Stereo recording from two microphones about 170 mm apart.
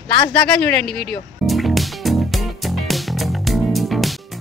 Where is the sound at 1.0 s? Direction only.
Centre (ahead or behind).